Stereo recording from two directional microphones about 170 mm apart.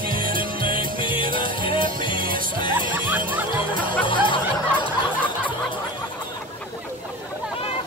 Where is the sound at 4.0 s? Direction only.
30° left (ahead or behind).